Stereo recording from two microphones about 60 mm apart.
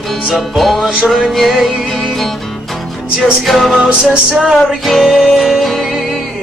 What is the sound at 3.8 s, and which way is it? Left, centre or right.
Music, centre.